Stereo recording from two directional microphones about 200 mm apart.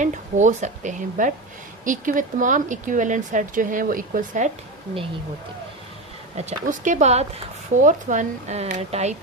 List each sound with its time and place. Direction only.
0.0 s speech: 35° right (ahead or behind)
6.3 s speech: 35° right (ahead or behind)